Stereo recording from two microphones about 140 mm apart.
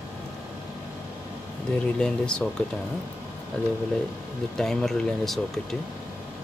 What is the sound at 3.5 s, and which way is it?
Speech, 5° left (ahead or behind).